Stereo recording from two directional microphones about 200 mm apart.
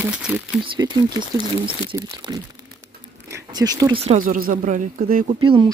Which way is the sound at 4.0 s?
35° right (ahead or behind).